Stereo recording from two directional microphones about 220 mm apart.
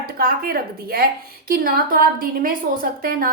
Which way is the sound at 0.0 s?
40° right (ahead or behind).